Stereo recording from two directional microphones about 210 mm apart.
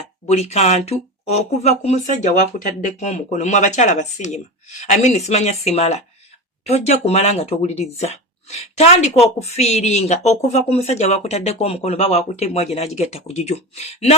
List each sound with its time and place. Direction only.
0.3 s speech: 30° left (ahead or behind)